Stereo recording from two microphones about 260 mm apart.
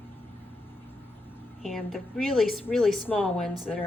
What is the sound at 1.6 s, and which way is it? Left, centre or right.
A woman's voice, centre.